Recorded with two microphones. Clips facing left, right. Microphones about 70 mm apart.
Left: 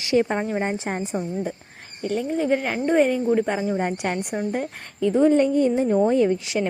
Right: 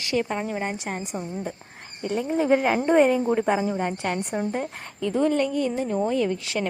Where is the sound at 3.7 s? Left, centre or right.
Centre.